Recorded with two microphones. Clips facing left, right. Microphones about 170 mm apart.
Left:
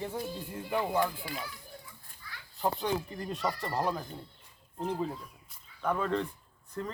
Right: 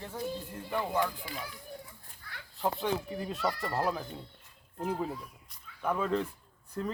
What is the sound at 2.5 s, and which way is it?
Speech, centre (ahead or behind).